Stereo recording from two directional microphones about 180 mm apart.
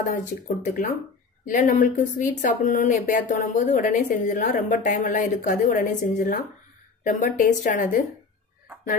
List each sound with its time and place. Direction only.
0.1 s speech: 50° left (ahead or behind)